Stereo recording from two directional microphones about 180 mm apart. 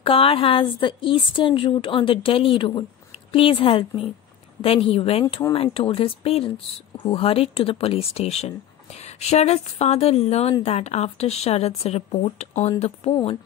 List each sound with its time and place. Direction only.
0.0 s a woman's voice: 30° left (ahead or behind)